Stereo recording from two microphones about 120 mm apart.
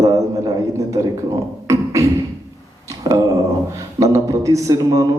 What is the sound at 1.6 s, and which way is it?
Beatboxing, 25° right (ahead or behind).